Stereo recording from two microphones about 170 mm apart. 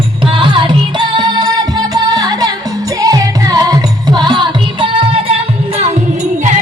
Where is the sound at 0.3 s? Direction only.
30° right (ahead or behind).